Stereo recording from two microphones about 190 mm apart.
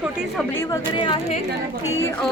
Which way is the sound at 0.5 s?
15° left (ahead or behind).